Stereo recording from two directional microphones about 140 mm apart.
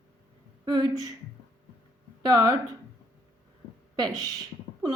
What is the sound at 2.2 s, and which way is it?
Speech, 30° right (ahead or behind).